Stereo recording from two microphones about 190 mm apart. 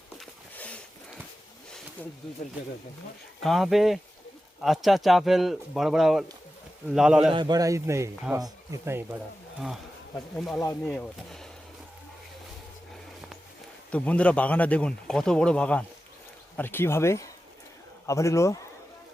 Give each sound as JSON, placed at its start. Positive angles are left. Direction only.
{"t": 0.2, "sound": "a sound", "side_deg": 5}
{"t": 3.4, "sound": "speech", "side_deg": 0}
{"t": 7.3, "sound": "speech", "side_deg": -20}
{"t": 10.3, "sound": "speech", "side_deg": 5}
{"t": 13.9, "sound": "speech", "side_deg": 5}